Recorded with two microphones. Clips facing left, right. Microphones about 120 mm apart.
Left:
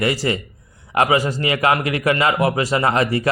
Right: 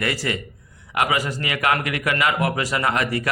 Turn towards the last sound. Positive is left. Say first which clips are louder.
# left 4 dB
turn(degrees=30)  # may be behind; listen again after turning